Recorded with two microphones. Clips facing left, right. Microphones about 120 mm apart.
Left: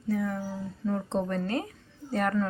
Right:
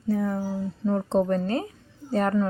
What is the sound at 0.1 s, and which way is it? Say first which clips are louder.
A woman's voice: right 4 dB; 35° right (ahead or behind).